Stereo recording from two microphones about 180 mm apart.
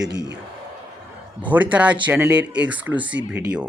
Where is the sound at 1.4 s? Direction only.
10° right (ahead or behind).